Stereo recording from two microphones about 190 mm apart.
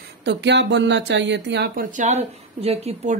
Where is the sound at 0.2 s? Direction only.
65° right (ahead or behind).